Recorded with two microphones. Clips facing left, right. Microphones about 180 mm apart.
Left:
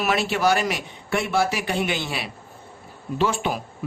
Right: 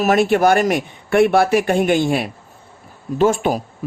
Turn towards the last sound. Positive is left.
turn(degrees=-45)  # may be behind; listen again after turning